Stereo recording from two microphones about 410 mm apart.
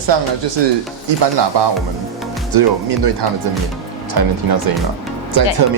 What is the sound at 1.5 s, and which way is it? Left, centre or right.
Speech, right.